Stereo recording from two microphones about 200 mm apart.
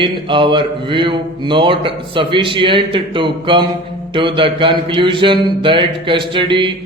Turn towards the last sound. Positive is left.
turn(degrees=-25)  # may be behind; listen again after turning